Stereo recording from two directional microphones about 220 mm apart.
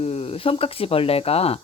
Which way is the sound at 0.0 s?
30° left (ahead or behind).